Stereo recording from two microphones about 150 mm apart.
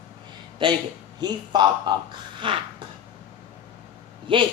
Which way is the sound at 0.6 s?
30° right (ahead or behind).